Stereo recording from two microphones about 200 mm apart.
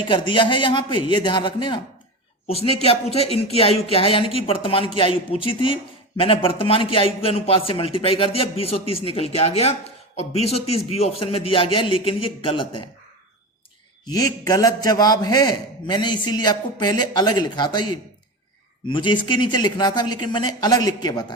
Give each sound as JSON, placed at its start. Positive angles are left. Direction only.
{"t": 0.1, "sound": "a man's voice", "side_deg": 25}
{"t": 14.1, "sound": "a man's voice", "side_deg": 20}
{"t": 18.9, "sound": "a man's voice", "side_deg": 25}